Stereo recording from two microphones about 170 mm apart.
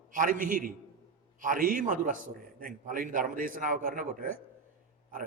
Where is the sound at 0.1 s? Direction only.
55° right (ahead or behind).